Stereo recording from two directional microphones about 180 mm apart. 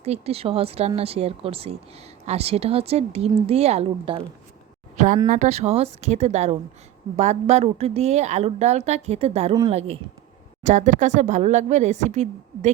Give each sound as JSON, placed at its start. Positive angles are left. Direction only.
{"t": 0.0, "sound": "a woman's voice", "side_deg": -35}
{"t": 4.9, "sound": "a woman's voice", "side_deg": -45}